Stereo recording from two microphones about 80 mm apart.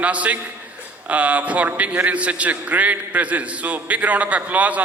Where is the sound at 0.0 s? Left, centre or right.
Centre.